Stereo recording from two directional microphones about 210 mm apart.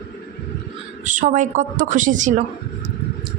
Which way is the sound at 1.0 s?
35° right (ahead or behind).